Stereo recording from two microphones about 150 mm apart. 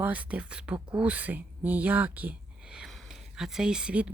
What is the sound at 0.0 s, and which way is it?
Speech, 10° right (ahead or behind).